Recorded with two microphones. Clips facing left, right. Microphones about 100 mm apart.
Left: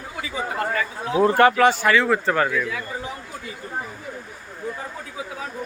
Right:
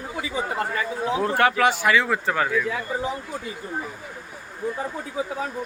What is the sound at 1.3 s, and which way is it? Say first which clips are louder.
Speech: left 4 dB; centre (ahead or behind).